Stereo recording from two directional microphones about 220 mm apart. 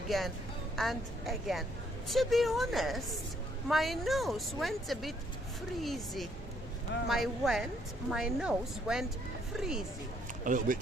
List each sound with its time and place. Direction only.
0.1 s speech: centre (ahead or behind)
10.4 s speech: 35° right (ahead or behind)